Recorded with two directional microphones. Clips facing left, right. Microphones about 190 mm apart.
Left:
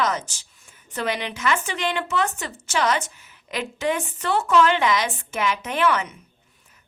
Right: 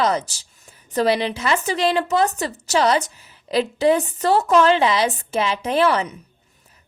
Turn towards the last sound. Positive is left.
turn(degrees=-35)  # may be behind; listen again after turning